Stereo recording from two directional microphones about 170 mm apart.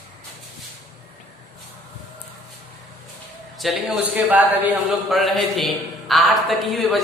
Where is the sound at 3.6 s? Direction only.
Centre (ahead or behind).